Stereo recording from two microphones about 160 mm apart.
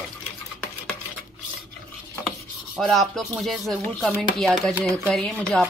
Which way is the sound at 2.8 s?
Centre (ahead or behind).